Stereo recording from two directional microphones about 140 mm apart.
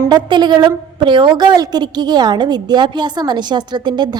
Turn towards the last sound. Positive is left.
turn(degrees=-30)  # may be behind; listen again after turning